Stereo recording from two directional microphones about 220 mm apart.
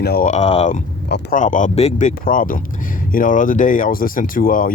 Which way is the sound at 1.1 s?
35° left (ahead or behind).